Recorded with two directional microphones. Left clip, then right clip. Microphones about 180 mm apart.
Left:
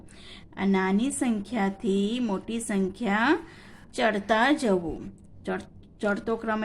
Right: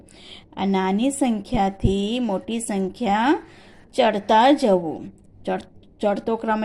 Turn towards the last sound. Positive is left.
turn(degrees=-15)  # may be behind; listen again after turning